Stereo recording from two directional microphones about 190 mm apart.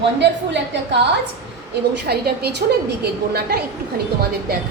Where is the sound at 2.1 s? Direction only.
60° right (ahead or behind).